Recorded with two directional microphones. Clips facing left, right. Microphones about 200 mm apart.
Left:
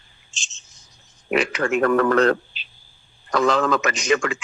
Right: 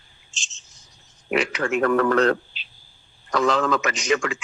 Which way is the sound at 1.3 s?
50° left (ahead or behind).